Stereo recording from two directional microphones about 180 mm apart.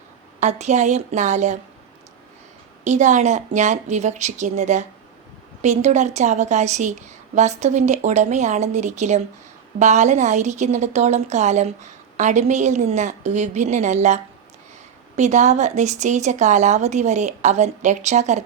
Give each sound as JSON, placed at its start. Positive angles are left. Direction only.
{"t": 0.3, "sound": "a woman's voice", "side_deg": -40}
{"t": 2.8, "sound": "a woman's voice", "side_deg": -40}